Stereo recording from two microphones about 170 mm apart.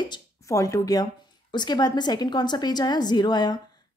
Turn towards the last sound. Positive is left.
turn(degrees=25)  # may be behind; listen again after turning